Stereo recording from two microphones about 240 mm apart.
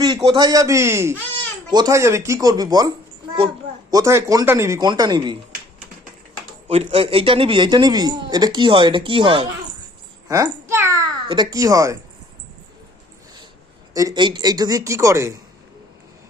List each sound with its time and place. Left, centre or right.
0.3 s a man's voice: centre
3.9 s a man's voice: centre
6.7 s speech: right
10.2 s a sound: centre
13.9 s a man's voice: centre